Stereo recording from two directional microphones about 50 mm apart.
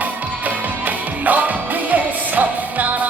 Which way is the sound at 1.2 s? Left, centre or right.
Right.